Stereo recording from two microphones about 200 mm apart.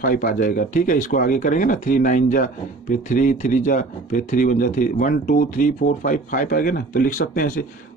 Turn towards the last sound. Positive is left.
turn(degrees=45)  # may be behind; listen again after turning